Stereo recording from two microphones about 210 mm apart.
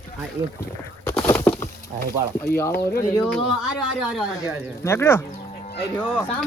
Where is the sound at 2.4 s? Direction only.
10° left (ahead or behind).